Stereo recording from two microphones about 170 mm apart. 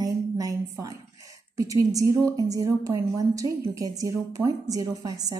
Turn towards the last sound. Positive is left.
turn(degrees=-20)  # may be behind; listen again after turning